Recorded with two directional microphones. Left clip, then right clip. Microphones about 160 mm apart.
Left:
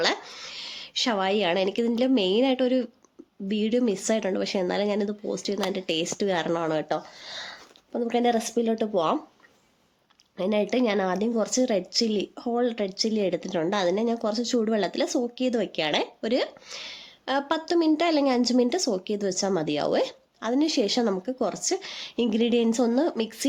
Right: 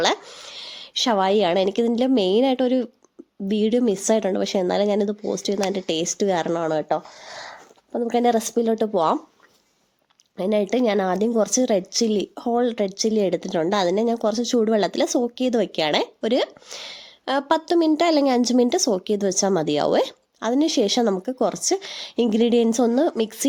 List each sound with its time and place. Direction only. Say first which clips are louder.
0.0 s speech: right 4 dB; 35° right (ahead or behind)
10.3 s a woman's voice: right 4 dB; 35° right (ahead or behind)